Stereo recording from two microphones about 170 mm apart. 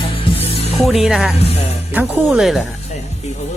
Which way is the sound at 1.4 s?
40° left (ahead or behind).